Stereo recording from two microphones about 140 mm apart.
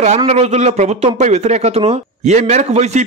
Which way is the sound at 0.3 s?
50° right (ahead or behind).